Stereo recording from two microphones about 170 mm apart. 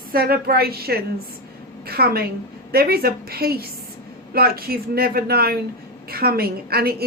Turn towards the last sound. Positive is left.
turn(degrees=-65)  # may be behind; listen again after turning